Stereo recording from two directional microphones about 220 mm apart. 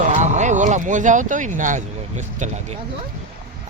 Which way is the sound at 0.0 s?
35° right (ahead or behind).